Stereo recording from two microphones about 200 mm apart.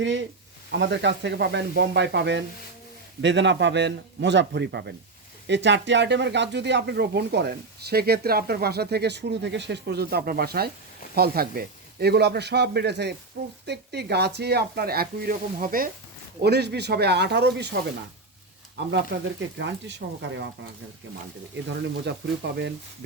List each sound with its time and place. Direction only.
0.0 s speech: 65° right (ahead or behind); by 15.9 s 45° right (ahead or behind)
16.4 s speech: 55° right (ahead or behind)
21.5 s speech: 60° right (ahead or behind)